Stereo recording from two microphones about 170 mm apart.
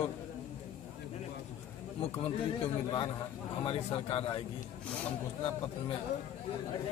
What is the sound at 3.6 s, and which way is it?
Speech, 30° left (ahead or behind).